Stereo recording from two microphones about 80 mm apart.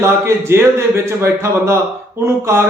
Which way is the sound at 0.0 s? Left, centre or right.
Right.